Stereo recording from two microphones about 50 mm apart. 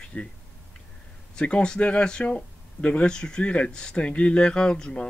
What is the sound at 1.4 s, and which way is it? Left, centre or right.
Speech, left.